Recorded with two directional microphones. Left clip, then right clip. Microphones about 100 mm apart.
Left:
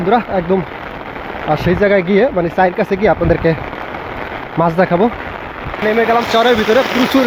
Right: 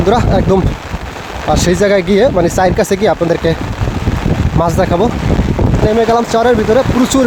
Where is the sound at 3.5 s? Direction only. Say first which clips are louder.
Right 1 dB; 55° right (ahead or behind).